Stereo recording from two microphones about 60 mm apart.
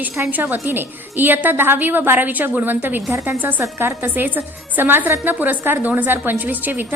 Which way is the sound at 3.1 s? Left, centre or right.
Right.